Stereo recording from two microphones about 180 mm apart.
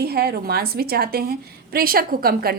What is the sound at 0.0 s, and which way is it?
A woman's voice, 60° right (ahead or behind).